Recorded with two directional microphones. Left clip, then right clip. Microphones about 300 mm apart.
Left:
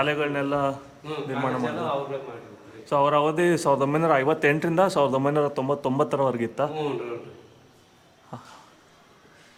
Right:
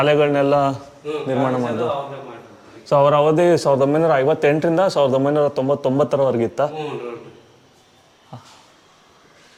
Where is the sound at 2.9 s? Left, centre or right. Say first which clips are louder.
Right 7 dB; centre.